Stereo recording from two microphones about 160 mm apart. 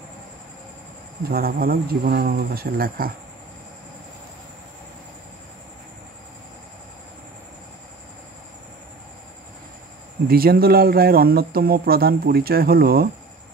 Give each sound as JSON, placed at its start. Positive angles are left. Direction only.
{"t": 1.3, "sound": "speech", "side_deg": -70}
{"t": 10.2, "sound": "speech", "side_deg": -70}